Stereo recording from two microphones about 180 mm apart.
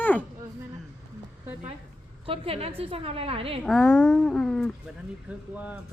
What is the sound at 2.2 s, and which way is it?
A woman's voice, 30° right (ahead or behind).